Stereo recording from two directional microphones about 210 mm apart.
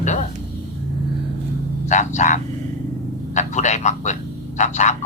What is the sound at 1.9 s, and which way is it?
Speech, 35° left (ahead or behind).